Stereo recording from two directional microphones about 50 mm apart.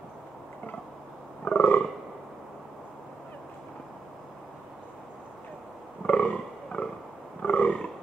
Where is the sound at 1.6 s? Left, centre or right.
Left.